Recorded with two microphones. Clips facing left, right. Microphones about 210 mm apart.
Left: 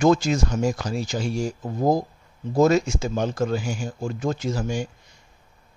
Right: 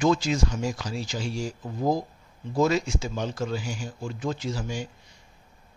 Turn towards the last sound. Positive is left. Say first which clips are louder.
# left 5 dB
turn(degrees=45)  # may be behind; listen again after turning